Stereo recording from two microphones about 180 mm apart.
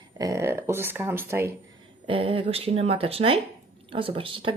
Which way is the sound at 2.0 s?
30° right (ahead or behind).